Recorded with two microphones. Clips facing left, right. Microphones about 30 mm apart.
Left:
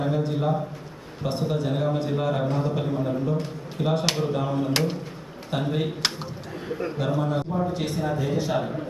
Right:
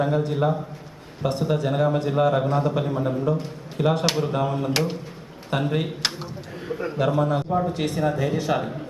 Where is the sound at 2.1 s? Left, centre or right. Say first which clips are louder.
Right 6 dB; right.